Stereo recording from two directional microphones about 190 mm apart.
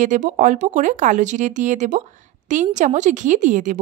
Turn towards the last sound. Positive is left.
turn(degrees=-40)  # may be behind; listen again after turning